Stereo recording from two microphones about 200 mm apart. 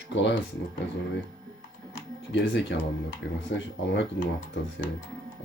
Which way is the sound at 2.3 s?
60° left (ahead or behind).